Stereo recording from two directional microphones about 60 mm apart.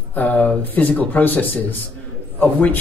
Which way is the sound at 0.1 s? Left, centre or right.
Left.